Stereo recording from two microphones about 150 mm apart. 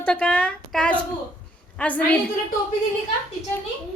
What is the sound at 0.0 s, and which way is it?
A woman's voice, 10° left (ahead or behind).